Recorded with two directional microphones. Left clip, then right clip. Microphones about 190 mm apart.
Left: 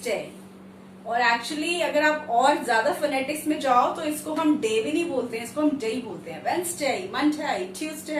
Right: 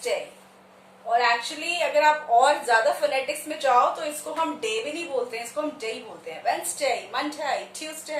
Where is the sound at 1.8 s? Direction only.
20° right (ahead or behind).